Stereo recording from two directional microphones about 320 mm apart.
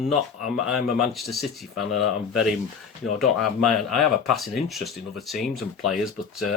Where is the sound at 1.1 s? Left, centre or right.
Centre.